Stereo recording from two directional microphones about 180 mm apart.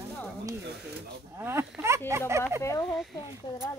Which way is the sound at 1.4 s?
15° right (ahead or behind).